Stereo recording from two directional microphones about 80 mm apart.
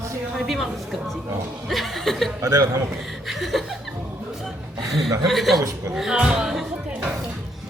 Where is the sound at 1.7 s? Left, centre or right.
Centre.